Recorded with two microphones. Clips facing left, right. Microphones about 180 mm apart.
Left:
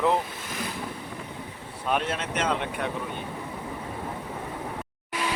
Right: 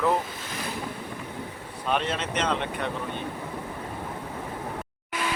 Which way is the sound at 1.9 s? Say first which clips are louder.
Even; 10° left (ahead or behind).